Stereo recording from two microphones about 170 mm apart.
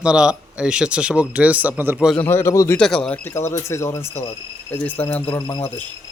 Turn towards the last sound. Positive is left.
turn(degrees=25)  # may be behind; listen again after turning